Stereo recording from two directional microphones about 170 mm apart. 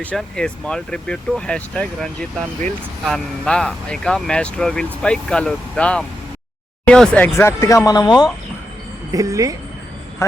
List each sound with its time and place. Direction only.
0.0 s speech: 5° left (ahead or behind)
3.1 s speech: 5° left (ahead or behind); by 8.3 s 25° left (ahead or behind)
9.1 s speech: 20° right (ahead or behind)